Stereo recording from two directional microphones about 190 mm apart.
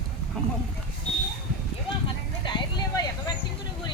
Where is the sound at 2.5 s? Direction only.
20° left (ahead or behind).